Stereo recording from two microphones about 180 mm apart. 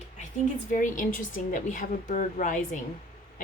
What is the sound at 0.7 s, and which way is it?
A woman's voice, 45° left (ahead or behind).